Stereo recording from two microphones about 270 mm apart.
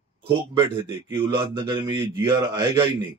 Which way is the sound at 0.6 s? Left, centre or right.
Centre.